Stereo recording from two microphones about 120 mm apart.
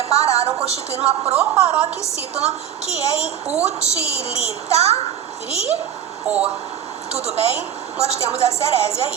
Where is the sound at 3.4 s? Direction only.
65° right (ahead or behind).